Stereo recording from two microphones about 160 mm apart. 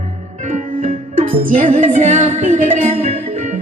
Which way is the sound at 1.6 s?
50° right (ahead or behind).